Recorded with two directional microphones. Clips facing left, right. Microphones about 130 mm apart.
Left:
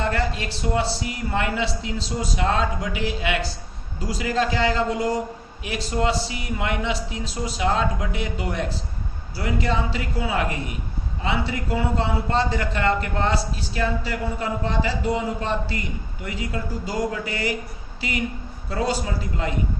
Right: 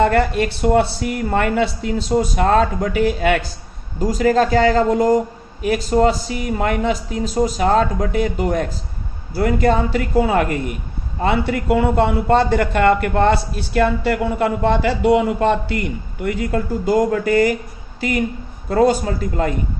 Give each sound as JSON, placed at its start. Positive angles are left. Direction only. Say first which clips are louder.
{"t": 0.0, "sound": "a man's voice", "louder": "right 9 dB", "side_deg": -60}
{"t": 18.7, "sound": "speech", "louder": "right 9 dB", "side_deg": -50}